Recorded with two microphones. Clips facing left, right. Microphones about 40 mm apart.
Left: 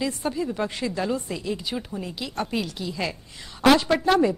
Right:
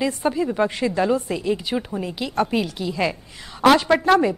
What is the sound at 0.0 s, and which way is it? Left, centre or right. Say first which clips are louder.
A woman's voice: right 5 dB; centre.